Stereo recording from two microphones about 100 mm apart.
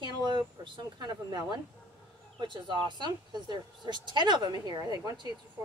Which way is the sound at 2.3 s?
50° right (ahead or behind).